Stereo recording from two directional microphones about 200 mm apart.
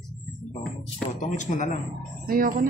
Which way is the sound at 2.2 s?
45° right (ahead or behind).